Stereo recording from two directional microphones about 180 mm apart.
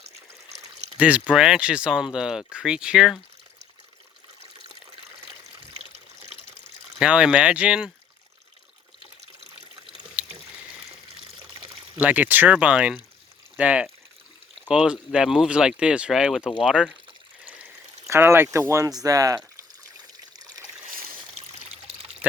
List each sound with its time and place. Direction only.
0.9 s speech: 5° right (ahead or behind)
7.0 s speech: 5° right (ahead or behind)
10.2 s a sound: 5° right (ahead or behind)
11.9 s speech: 10° right (ahead or behind)
18.1 s speech: 15° right (ahead or behind)
20.0 s water: 20° right (ahead or behind)
22.2 s speech: 10° right (ahead or behind)